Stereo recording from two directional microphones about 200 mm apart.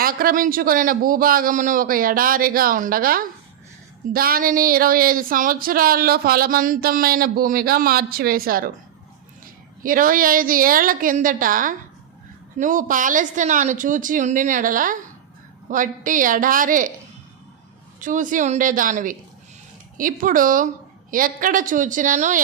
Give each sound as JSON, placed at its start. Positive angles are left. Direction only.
{"t": 0.0, "sound": "speech", "side_deg": -45}
{"t": 9.8, "sound": "speech", "side_deg": -45}
{"t": 18.0, "sound": "speech", "side_deg": -40}